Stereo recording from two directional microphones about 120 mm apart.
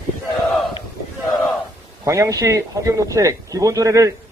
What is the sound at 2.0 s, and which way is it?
A man's voice, 25° right (ahead or behind).